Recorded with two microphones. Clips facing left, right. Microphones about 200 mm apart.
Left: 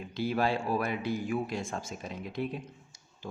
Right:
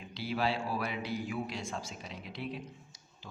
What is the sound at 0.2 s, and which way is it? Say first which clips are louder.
A man's voice: left 4 dB; 50° left (ahead or behind).